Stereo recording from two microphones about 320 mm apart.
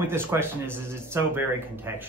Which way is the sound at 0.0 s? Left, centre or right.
Centre.